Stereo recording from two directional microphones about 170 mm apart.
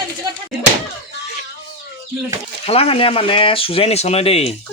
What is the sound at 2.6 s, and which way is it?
Speech, 35° left (ahead or behind).